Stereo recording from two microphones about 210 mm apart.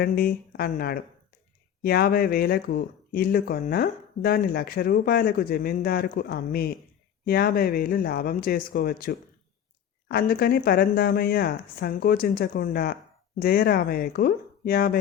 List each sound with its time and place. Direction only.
0.0 s speech: 45° left (ahead or behind)